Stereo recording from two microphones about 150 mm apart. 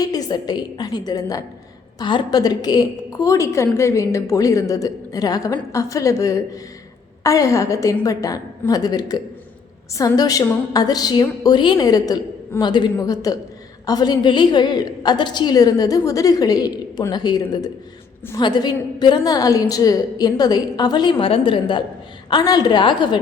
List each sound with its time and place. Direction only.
0.0 s a woman's voice: 25° left (ahead or behind)